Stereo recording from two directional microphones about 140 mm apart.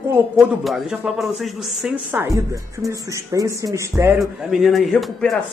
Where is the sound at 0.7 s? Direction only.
Centre (ahead or behind).